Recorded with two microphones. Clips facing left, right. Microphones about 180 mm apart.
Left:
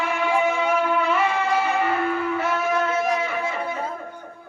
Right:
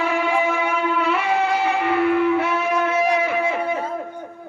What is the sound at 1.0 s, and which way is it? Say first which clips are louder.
Music: right 1 dB; 65° right (ahead or behind).